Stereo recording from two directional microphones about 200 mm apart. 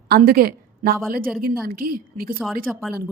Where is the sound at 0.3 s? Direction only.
45° right (ahead or behind).